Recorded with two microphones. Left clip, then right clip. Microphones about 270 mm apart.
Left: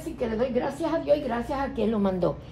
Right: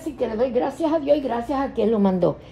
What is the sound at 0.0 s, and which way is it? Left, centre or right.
A woman's voice, right.